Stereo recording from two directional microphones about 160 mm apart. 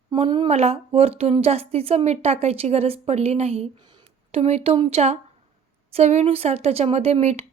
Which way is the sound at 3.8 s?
30° right (ahead or behind).